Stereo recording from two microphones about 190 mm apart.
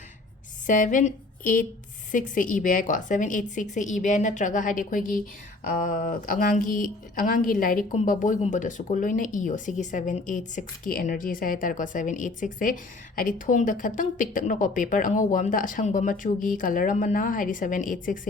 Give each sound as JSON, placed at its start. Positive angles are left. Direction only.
{"t": 0.7, "sound": "a woman's voice", "side_deg": 40}